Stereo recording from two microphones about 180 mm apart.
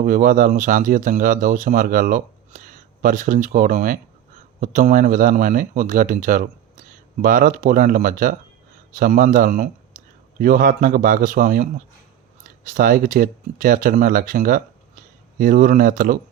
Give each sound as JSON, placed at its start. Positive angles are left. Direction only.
{"t": 0.0, "sound": "speech", "side_deg": -50}